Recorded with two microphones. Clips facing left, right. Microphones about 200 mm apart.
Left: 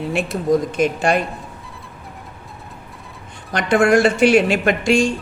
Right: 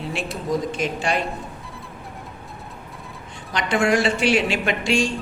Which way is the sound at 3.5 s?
50° left (ahead or behind).